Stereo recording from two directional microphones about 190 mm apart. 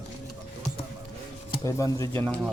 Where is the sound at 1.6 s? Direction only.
15° left (ahead or behind).